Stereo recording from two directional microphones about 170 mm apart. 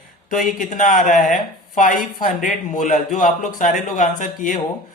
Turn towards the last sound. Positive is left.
turn(degrees=50)  # may be behind; listen again after turning